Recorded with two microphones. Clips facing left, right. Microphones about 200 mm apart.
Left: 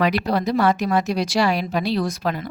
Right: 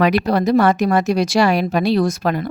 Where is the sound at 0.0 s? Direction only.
55° right (ahead or behind).